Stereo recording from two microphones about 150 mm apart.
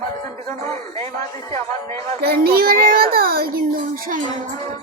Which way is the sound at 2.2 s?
90° right.